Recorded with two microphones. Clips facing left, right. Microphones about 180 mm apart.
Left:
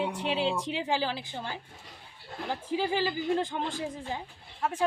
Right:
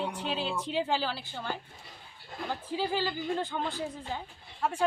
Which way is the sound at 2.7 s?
15° left (ahead or behind).